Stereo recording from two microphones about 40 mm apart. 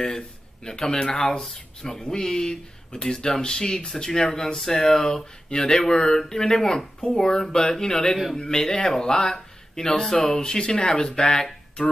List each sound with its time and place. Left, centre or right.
0.7 s speech: centre